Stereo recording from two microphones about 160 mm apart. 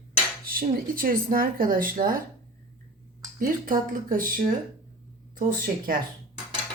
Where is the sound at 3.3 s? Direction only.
60° right (ahead or behind).